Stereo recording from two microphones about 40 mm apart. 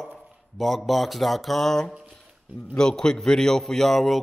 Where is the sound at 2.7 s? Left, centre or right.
Centre.